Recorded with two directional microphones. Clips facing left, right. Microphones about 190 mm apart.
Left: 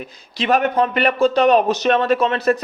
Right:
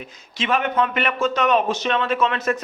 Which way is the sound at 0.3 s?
40° left (ahead or behind).